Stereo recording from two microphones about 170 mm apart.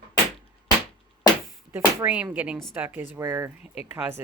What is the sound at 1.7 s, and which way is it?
Speech, 10° right (ahead or behind).